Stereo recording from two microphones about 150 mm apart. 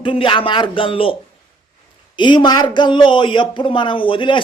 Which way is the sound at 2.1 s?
30° left (ahead or behind).